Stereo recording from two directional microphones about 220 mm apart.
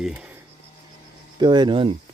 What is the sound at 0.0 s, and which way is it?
Speech, 5° right (ahead or behind).